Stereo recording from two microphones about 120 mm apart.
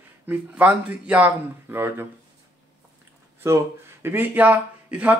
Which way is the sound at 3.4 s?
20° right (ahead or behind).